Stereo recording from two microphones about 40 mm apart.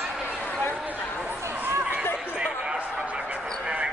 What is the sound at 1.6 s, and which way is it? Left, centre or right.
Chatter, right.